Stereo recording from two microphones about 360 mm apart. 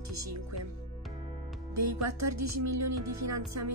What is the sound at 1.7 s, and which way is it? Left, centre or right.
Speech, right.